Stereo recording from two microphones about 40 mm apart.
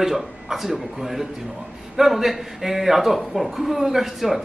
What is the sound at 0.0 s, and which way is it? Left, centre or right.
A man's voice, centre.